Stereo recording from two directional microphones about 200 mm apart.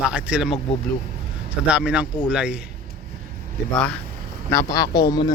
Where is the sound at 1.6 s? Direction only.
5° right (ahead or behind).